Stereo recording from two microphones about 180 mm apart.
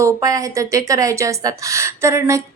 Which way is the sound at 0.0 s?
20° right (ahead or behind).